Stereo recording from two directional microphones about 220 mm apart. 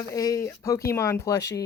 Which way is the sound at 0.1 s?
15° left (ahead or behind).